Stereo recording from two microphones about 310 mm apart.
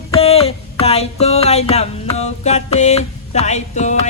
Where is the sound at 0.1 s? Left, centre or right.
Centre.